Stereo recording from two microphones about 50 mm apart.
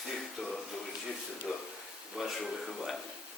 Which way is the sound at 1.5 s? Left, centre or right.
Centre.